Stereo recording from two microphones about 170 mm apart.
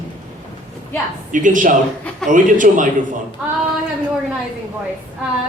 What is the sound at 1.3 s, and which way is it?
A man's voice, 50° right (ahead or behind).